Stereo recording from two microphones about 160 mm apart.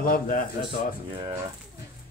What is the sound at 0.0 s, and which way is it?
Speech, 60° left (ahead or behind).